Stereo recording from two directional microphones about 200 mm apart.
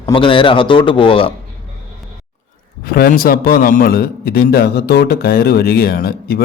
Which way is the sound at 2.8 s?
45° left (ahead or behind).